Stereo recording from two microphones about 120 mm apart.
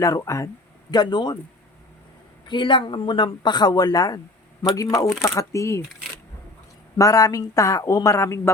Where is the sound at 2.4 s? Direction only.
40° left (ahead or behind); by 5.8 s 25° left (ahead or behind).